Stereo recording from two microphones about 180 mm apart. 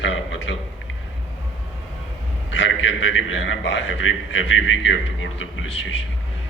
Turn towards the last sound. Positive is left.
turn(degrees=90)